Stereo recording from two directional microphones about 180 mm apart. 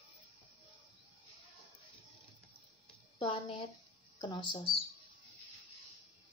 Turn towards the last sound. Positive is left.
turn(degrees=30)  # may be behind; listen again after turning